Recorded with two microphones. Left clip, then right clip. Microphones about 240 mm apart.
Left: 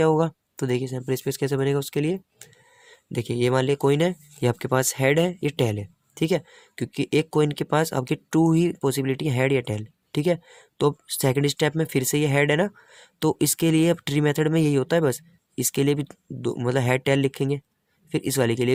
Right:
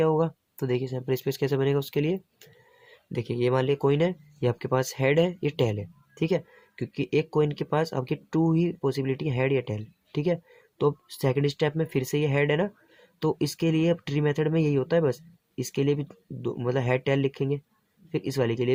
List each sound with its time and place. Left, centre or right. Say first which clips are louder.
0.0 s speech: left 3 dB; left